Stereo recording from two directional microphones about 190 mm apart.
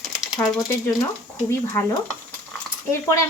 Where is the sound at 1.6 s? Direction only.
15° left (ahead or behind).